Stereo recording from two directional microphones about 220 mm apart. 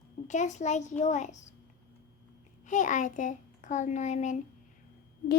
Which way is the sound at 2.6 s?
35° left (ahead or behind).